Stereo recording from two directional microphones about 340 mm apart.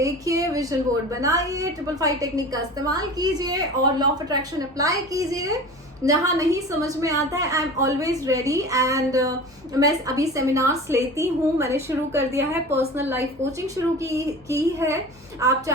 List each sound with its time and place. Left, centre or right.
0.0 s a woman's voice: centre